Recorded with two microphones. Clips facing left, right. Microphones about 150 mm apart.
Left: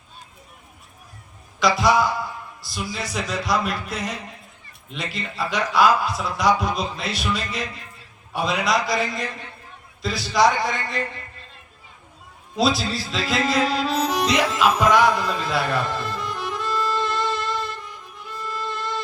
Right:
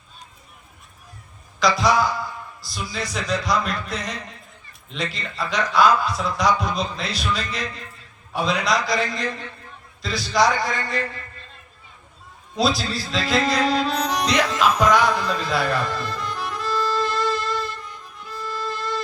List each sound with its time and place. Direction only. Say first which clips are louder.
1.5 s a man's voice: left 1 dB; centre (ahead or behind)
12.5 s speech: left 1 dB; centre (ahead or behind)
18.3 s music: right 1 dB; centre (ahead or behind)